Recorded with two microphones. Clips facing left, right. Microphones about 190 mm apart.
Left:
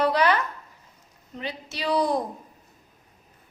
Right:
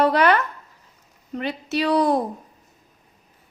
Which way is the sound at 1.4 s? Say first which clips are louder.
Right 8 dB; 60° right (ahead or behind).